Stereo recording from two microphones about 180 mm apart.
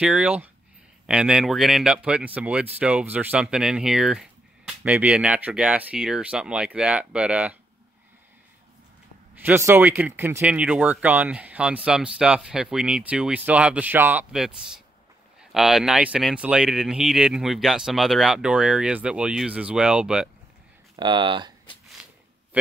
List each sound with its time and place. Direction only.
0.0 s speech: 5° right (ahead or behind)
9.3 s speech: 10° right (ahead or behind)
20.9 s speech: 25° right (ahead or behind)
22.0 s zipper: 5° right (ahead or behind)